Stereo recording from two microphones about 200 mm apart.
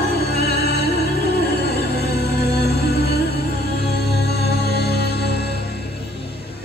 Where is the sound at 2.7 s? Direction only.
55° left (ahead or behind).